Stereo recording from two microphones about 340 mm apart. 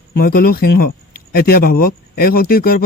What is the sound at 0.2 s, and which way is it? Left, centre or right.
Speech, left.